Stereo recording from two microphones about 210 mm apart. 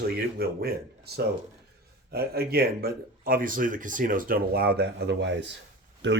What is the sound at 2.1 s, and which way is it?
Speech, 50° right (ahead or behind).